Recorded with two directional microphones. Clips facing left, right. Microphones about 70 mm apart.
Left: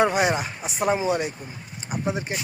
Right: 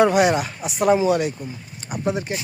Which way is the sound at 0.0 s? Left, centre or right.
Left.